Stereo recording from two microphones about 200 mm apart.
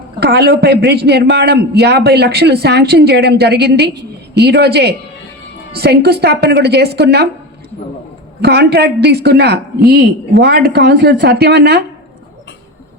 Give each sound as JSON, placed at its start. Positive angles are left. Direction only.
{"t": 0.2, "sound": "a man's voice", "side_deg": -55}
{"t": 8.4, "sound": "a man's voice", "side_deg": -55}